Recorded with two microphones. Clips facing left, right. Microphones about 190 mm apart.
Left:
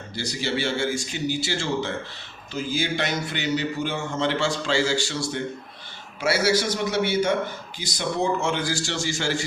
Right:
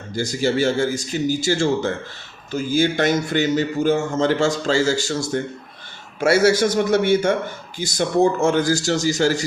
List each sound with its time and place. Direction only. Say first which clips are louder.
0.1 s a man's voice: right 7 dB; 45° right (ahead or behind)